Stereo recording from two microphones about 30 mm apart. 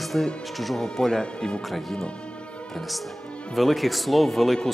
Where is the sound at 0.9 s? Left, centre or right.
Left.